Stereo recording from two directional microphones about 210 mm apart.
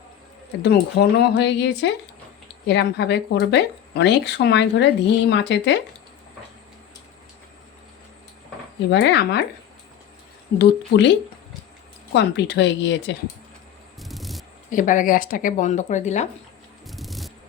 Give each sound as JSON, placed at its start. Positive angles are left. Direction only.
{"t": 0.6, "sound": "speech", "side_deg": 50}
{"t": 8.9, "sound": "speech", "side_deg": 55}
{"t": 10.6, "sound": "speech", "side_deg": 55}
{"t": 12.1, "sound": "speech", "side_deg": 55}
{"t": 14.0, "sound": "a sound", "side_deg": 0}
{"t": 14.7, "sound": "speech", "side_deg": 40}
{"t": 16.8, "sound": "a sound", "side_deg": 0}